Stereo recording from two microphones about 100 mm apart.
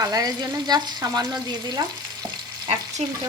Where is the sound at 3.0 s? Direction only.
90° right.